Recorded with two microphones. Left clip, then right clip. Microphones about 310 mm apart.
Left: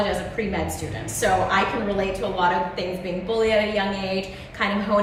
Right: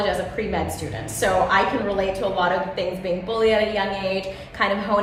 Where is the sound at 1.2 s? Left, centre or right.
Centre.